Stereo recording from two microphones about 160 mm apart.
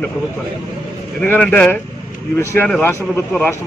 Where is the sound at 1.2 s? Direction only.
10° left (ahead or behind).